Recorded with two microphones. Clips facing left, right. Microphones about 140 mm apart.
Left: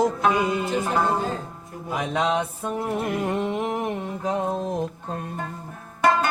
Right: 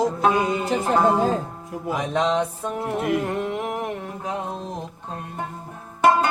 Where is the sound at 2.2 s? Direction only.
10° left (ahead or behind).